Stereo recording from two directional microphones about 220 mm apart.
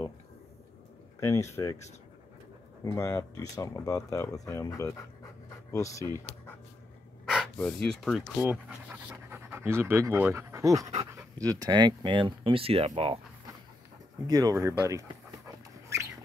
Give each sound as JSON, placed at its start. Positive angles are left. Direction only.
{"t": 1.2, "sound": "speech", "side_deg": 15}
{"t": 2.8, "sound": "speech", "side_deg": 15}
{"t": 7.5, "sound": "speech", "side_deg": 5}
{"t": 14.2, "sound": "dog", "side_deg": -15}